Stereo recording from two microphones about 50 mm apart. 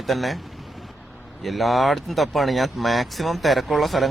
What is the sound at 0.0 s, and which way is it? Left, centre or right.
Speech, centre.